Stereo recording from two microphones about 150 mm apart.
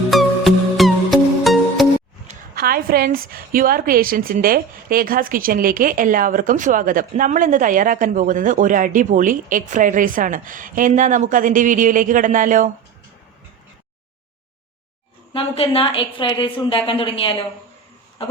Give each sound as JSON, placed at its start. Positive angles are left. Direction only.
{"t": 0.1, "sound": "music", "side_deg": 0}
{"t": 2.6, "sound": "a woman's voice", "side_deg": -80}
{"t": 15.3, "sound": "a woman's voice", "side_deg": 35}
{"t": 18.2, "sound": "a sound", "side_deg": 40}